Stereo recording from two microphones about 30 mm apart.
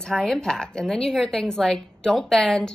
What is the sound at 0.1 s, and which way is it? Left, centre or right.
A woman's voice, centre.